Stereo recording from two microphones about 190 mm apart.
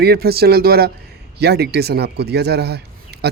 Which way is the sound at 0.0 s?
55° right (ahead or behind).